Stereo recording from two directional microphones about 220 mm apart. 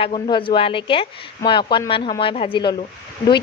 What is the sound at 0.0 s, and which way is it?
A woman's voice, 25° left (ahead or behind).